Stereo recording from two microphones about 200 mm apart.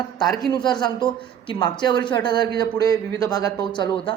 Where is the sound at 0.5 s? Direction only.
20° left (ahead or behind).